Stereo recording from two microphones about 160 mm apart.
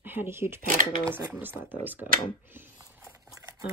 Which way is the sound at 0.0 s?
15° right (ahead or behind).